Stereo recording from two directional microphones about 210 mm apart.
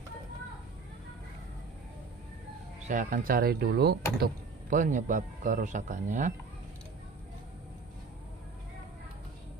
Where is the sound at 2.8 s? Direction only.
40° right (ahead or behind).